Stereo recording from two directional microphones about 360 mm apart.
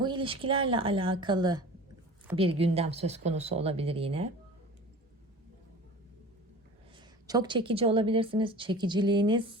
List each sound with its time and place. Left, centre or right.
0.0 s a woman's voice: centre
7.3 s a woman's voice: centre